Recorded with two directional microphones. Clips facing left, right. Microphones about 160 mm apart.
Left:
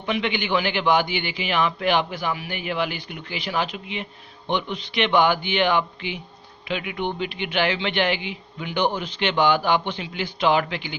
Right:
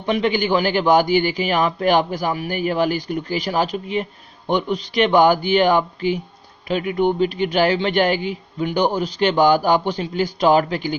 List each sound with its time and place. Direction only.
0.0 s a man's voice: 40° right (ahead or behind)